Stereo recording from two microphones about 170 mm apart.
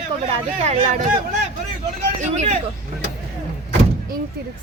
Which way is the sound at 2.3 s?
40° right (ahead or behind).